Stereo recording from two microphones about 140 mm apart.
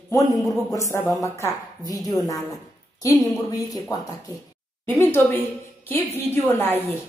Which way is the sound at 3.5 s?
25° left (ahead or behind).